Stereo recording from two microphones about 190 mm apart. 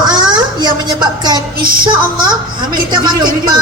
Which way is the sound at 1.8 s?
25° right (ahead or behind).